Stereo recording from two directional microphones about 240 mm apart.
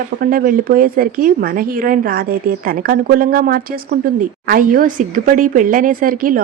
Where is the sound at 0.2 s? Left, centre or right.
Right.